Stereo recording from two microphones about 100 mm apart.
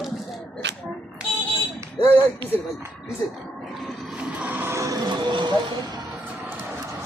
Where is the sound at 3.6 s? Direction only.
5° right (ahead or behind); by 5.0 s 30° right (ahead or behind).